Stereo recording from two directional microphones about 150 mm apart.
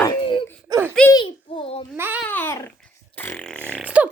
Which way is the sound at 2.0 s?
15° right (ahead or behind).